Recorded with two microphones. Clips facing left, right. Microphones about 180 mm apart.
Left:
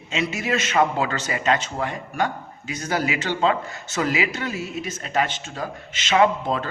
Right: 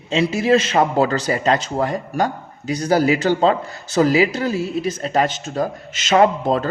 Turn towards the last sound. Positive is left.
turn(degrees=-40)  # may be behind; listen again after turning